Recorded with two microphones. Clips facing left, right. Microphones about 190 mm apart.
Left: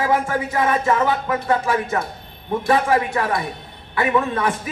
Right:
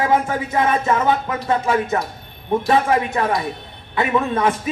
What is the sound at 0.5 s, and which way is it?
Speech, 20° right (ahead or behind).